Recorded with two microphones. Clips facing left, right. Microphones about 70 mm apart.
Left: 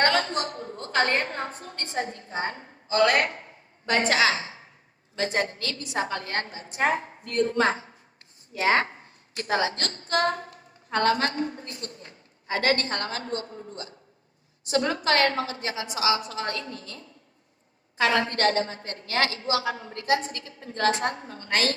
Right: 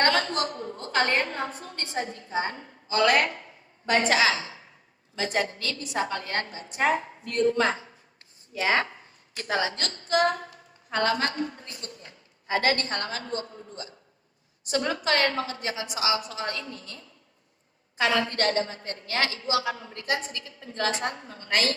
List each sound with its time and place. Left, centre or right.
0.1 s a woman's voice: left
10.5 s a sound: left
11.4 s a woman's voice: left